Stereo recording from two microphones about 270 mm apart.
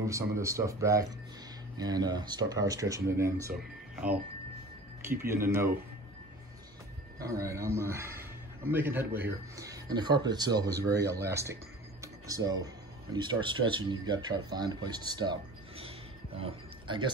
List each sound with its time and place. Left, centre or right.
0.0 s a man's voice: centre
3.9 s music: centre
5.0 s a man's voice: centre
7.2 s a man's voice: centre
12.0 s a sound: centre
13.1 s a man's voice: centre
16.3 s speech: centre